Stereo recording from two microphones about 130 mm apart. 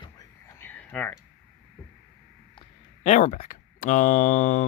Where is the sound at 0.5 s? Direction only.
15° left (ahead or behind).